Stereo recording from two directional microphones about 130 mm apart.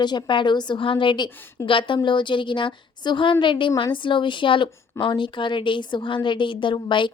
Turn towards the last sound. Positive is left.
turn(degrees=40)  # may be behind; listen again after turning